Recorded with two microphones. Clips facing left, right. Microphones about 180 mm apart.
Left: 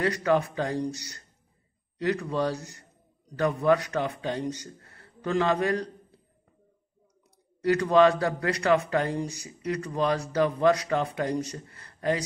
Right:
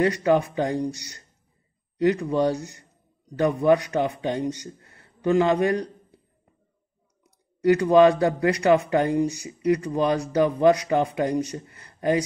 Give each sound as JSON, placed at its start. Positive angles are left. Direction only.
{"t": 0.0, "sound": "speech", "side_deg": -20}
{"t": 7.6, "sound": "speech", "side_deg": -20}